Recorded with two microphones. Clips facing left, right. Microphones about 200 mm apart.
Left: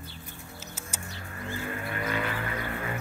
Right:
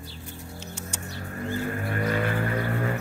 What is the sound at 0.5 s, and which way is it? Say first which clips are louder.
Music: right 3 dB; 5° left (ahead or behind).